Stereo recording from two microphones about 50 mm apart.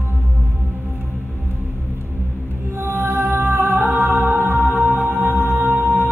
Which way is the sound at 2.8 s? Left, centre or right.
Right.